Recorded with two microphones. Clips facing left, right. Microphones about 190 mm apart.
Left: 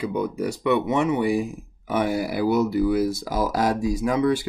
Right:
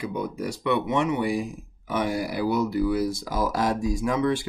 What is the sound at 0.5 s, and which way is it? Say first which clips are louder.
Speech: left 2 dB; 10° left (ahead or behind).